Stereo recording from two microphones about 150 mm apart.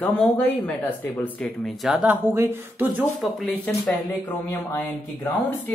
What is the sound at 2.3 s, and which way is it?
Speech, 15° right (ahead or behind).